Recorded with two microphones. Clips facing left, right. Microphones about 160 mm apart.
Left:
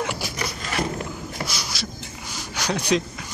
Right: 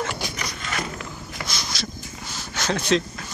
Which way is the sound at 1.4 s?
10° left (ahead or behind).